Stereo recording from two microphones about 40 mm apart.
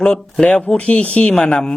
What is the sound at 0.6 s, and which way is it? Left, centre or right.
Speech, left.